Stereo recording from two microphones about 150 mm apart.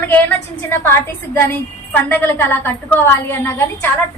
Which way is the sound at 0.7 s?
15° left (ahead or behind).